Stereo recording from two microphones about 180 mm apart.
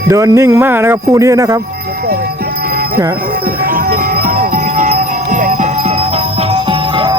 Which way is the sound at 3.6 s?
55° right (ahead or behind).